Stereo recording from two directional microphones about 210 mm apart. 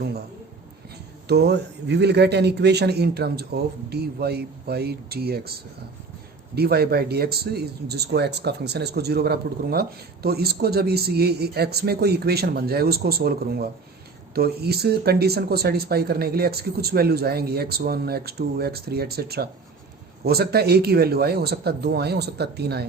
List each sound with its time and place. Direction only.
1.3 s speech: 55° right (ahead or behind)
6.6 s speech: 50° right (ahead or behind)